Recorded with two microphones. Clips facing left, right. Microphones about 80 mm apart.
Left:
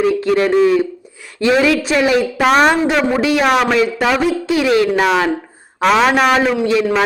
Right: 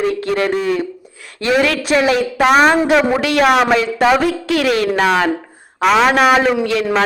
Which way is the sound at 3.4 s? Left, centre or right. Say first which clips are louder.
Right 4 dB; centre.